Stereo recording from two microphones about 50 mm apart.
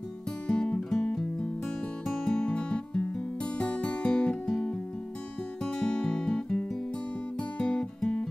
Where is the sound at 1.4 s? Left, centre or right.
Centre.